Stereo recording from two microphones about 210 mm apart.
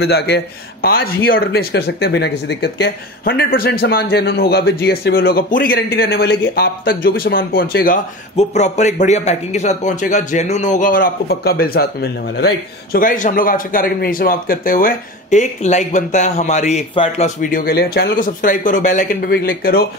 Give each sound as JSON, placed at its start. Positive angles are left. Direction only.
{"t": 0.0, "sound": "a man's voice", "side_deg": 50}
{"t": 17.4, "sound": "speech", "side_deg": 40}